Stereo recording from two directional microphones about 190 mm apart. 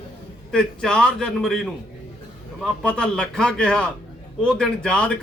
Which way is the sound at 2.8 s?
5° left (ahead or behind).